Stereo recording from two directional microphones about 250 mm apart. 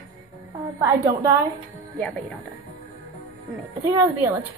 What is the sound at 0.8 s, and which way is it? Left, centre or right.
Speech, centre.